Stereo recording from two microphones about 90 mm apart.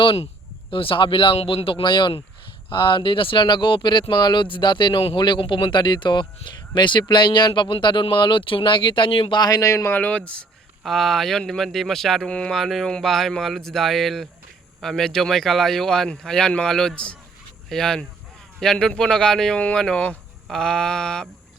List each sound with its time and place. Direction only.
0.7 s speech: 75° left (ahead or behind)
9.4 s speech: 40° left (ahead or behind)
9.9 s speech: 20° left (ahead or behind)
10.8 s speech: centre (ahead or behind)